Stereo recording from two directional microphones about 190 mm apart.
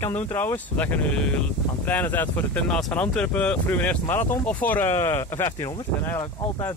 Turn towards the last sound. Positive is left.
turn(degrees=15)  # may be behind; listen again after turning